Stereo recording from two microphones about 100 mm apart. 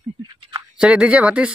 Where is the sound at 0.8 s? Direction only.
10° right (ahead or behind).